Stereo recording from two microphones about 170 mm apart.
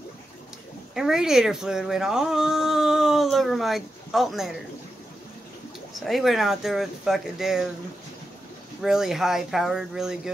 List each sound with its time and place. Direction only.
0.9 s speech: 5° right (ahead or behind)
5.9 s speech: centre (ahead or behind)
8.8 s speech: 5° right (ahead or behind)